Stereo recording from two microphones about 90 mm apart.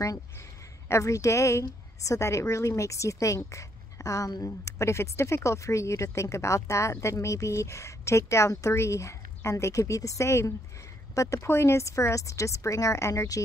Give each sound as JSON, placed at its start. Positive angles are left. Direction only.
{"t": 0.8, "sound": "speech", "side_deg": 35}